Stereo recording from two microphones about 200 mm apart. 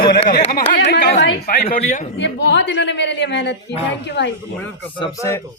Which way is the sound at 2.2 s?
60° left (ahead or behind).